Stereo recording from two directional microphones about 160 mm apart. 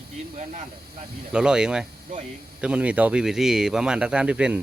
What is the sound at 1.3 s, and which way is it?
Speech, 5° right (ahead or behind).